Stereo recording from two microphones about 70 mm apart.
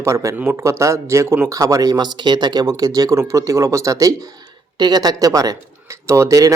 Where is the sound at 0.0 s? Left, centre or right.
Right.